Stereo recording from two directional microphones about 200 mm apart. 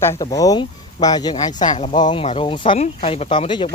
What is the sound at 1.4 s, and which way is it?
Speech, 35° left (ahead or behind).